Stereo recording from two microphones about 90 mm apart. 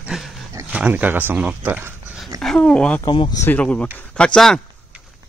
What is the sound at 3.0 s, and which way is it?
Speech, 55° left (ahead or behind).